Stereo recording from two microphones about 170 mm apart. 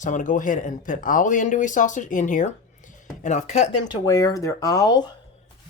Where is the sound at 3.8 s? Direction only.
20° left (ahead or behind).